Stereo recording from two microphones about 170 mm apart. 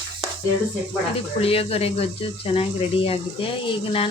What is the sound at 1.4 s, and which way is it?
Speech, 35° left (ahead or behind).